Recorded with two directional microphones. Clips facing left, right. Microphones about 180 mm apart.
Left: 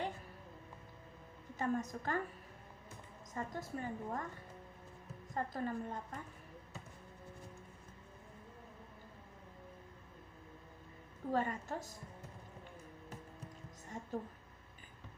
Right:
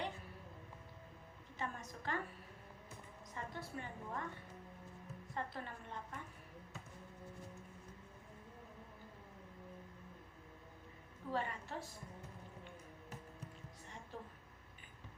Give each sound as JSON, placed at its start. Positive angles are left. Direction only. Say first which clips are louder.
{"t": 1.5, "sound": "a woman's voice", "louder": "left 9 dB", "side_deg": 45}
{"t": 3.3, "sound": "a woman's voice", "louder": "left 5 dB", "side_deg": 45}
{"t": 5.3, "sound": "a woman's voice", "louder": "left 7 dB", "side_deg": 40}
{"t": 11.3, "sound": "a woman's voice", "louder": "left 5 dB", "side_deg": 45}
{"t": 14.1, "sound": "a woman's voice", "louder": "left 9 dB", "side_deg": 45}